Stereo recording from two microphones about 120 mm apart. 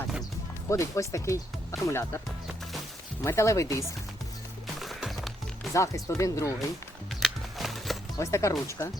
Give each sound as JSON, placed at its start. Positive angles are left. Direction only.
{"t": 0.7, "sound": "speech", "side_deg": 25}
{"t": 3.2, "sound": "speech", "side_deg": 25}
{"t": 4.8, "sound": "music", "side_deg": 0}
{"t": 5.7, "sound": "speech", "side_deg": 25}
{"t": 7.1, "sound": "music", "side_deg": 0}
{"t": 8.2, "sound": "speech", "side_deg": 25}